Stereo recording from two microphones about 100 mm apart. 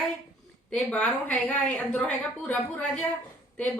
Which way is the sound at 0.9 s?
15° left (ahead or behind).